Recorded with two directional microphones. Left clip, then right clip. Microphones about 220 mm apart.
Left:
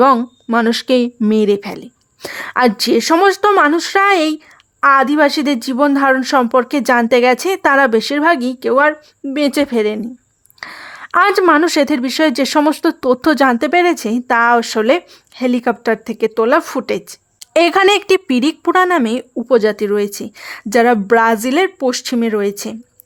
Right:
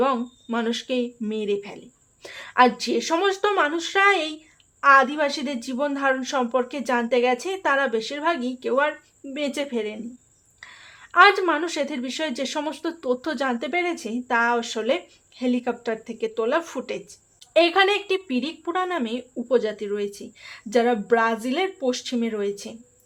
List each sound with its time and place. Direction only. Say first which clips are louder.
0.0 s speech: left 12 dB; 45° left (ahead or behind)